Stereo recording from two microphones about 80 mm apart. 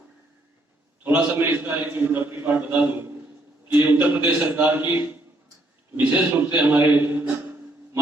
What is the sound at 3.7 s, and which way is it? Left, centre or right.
A man's voice, right.